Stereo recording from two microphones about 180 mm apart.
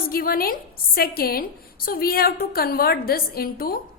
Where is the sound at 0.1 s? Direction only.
55° left (ahead or behind).